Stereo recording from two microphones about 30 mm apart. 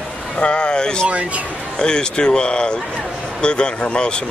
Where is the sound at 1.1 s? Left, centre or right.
Right.